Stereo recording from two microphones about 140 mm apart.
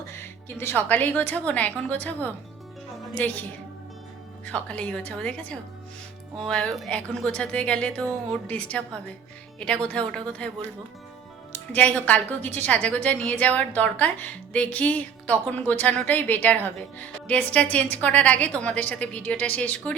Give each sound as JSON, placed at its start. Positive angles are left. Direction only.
{"t": 0.1, "sound": "a woman's voice", "side_deg": 15}
{"t": 4.4, "sound": "a woman's voice", "side_deg": 10}
{"t": 11.7, "sound": "a woman's voice", "side_deg": 10}